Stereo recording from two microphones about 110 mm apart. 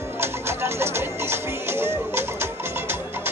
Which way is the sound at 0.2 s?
25° right (ahead or behind).